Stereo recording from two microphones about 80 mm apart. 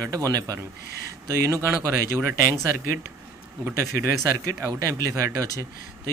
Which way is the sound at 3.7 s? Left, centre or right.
Right.